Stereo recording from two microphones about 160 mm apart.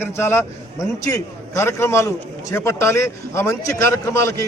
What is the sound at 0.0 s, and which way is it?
A man's voice, 15° left (ahead or behind).